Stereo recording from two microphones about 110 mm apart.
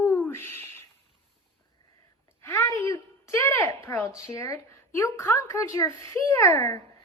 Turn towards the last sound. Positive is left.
turn(degrees=25)  # may be behind; listen again after turning